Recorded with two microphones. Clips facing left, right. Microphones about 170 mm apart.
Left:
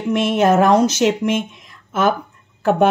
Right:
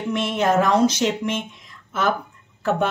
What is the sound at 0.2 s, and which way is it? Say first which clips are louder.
Speech: left 5 dB; 50° left (ahead or behind).